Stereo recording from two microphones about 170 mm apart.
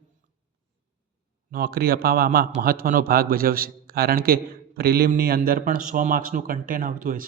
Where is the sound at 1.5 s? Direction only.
60° right (ahead or behind).